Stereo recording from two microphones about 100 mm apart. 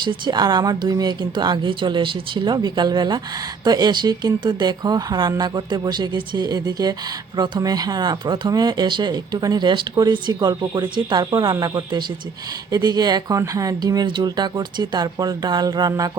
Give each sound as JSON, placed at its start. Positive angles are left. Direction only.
{"t": 0.0, "sound": "speech", "side_deg": -50}
{"t": 7.3, "sound": "speech", "side_deg": -50}
{"t": 7.6, "sound": "speech", "side_deg": -40}